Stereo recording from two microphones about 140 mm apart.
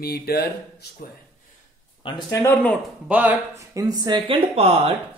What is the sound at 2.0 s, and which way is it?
Speech, 30° left (ahead or behind).